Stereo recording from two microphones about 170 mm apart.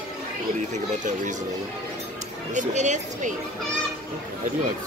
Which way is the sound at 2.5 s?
45° right (ahead or behind).